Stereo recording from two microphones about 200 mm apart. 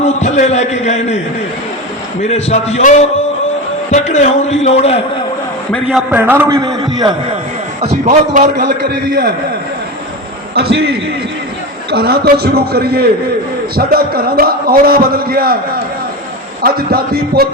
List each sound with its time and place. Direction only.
0.0 s a man's voice: 35° left (ahead or behind)
2.2 s speech: 30° left (ahead or behind)
3.9 s speech: 35° left (ahead or behind)
5.7 s a man's voice: 5° right (ahead or behind); by 7.2 s 20° right (ahead or behind)
8.0 s a man's voice: 40° right (ahead or behind)
10.5 s a man's voice: 50° right (ahead or behind)
16.6 s a man's voice: 50° right (ahead or behind)